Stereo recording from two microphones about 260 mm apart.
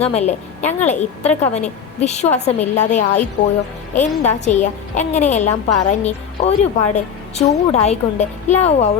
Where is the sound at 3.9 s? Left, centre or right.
Left.